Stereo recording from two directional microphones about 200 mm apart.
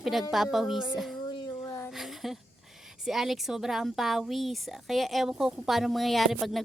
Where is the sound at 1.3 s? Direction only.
20° left (ahead or behind).